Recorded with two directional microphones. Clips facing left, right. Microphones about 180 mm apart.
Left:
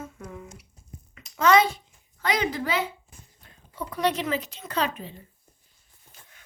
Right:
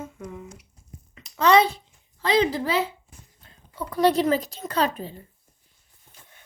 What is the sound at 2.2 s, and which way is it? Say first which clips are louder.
Speech: right 5 dB; 30° right (ahead or behind).